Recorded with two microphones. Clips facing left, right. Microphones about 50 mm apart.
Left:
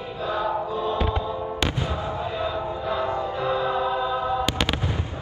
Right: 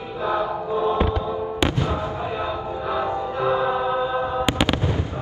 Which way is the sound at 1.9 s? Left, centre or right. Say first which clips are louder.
Right 2 dB; right.